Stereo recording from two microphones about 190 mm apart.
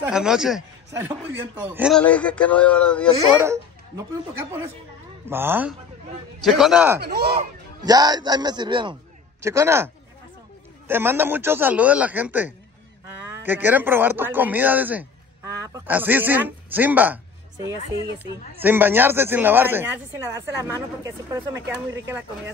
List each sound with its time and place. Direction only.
0.1 s a man's voice: 5° right (ahead or behind)
2.0 s speech: 5° left (ahead or behind)
3.3 s speech: 15° right (ahead or behind)
6.4 s a man's voice: centre (ahead or behind)
7.0 s speech: 60° right (ahead or behind)
7.8 s speech: 20° right (ahead or behind)
10.9 s speech: 10° right (ahead or behind)
18.6 s speech: 10° right (ahead or behind)